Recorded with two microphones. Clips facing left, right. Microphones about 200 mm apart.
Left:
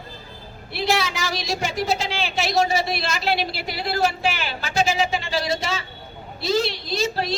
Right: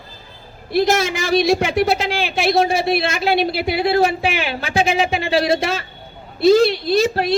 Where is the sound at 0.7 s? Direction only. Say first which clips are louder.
Right 7 dB; 45° right (ahead or behind).